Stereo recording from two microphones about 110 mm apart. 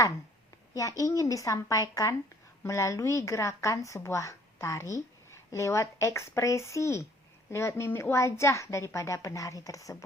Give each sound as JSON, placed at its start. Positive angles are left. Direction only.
{"t": 0.7, "sound": "a woman's voice", "side_deg": 30}